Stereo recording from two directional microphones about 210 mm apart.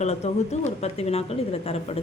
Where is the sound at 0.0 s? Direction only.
30° left (ahead or behind).